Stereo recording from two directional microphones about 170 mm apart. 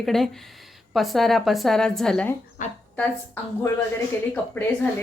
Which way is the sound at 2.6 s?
50° left (ahead or behind).